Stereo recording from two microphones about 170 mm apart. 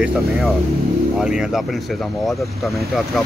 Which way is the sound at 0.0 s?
5° right (ahead or behind).